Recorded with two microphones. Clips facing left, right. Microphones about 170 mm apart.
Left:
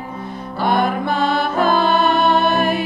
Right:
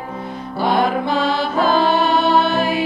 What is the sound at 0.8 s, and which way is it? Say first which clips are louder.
Music: right 1 dB; 55° left (ahead or behind).